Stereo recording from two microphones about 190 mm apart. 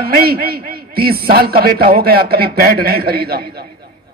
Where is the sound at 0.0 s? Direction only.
55° right (ahead or behind).